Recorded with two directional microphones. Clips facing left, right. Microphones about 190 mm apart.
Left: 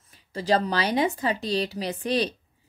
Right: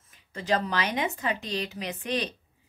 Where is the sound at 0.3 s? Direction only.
35° left (ahead or behind).